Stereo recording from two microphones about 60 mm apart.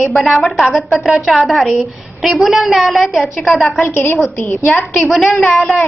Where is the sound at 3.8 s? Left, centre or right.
Left.